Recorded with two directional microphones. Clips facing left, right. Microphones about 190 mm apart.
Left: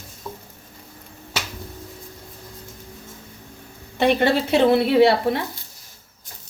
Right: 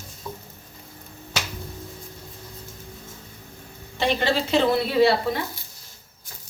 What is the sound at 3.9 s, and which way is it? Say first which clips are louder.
Speech: left 5 dB; 55° left (ahead or behind).